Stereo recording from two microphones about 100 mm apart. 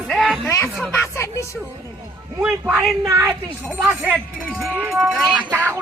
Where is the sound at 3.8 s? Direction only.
15° right (ahead or behind).